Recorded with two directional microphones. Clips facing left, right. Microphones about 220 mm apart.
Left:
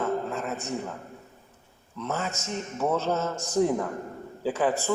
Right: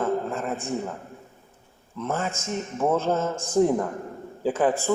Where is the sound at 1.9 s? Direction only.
50° right (ahead or behind).